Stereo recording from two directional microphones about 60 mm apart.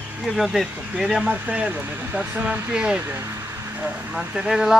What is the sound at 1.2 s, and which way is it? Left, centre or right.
Speech, right.